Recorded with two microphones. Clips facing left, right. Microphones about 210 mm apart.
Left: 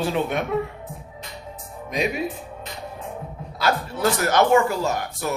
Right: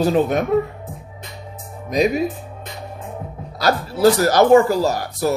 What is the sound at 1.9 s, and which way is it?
Speech, 40° right (ahead or behind).